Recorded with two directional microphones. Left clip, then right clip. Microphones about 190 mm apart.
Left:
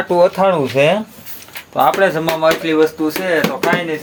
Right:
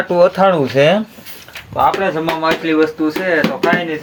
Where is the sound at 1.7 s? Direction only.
50° left (ahead or behind).